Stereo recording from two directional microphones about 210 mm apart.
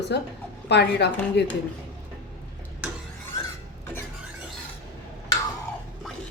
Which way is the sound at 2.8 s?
5° right (ahead or behind).